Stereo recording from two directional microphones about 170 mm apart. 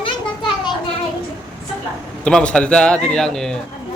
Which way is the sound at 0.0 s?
30° left (ahead or behind).